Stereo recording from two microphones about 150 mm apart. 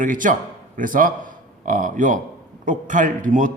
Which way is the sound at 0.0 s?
60° right (ahead or behind).